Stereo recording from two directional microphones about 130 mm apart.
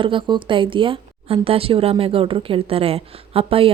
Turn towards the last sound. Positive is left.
turn(degrees=-45)  # may be behind; listen again after turning